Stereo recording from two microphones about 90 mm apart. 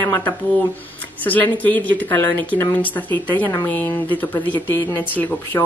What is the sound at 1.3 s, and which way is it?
Speech, 20° left (ahead or behind).